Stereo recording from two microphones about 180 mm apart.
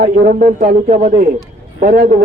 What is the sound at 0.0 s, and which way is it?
Speech, 40° right (ahead or behind).